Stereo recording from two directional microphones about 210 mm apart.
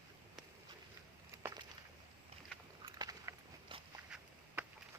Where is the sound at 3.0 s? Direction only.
20° right (ahead or behind).